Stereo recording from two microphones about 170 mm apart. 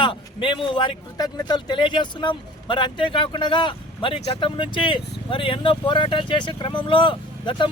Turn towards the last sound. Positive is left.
turn(degrees=30)  # may be behind; listen again after turning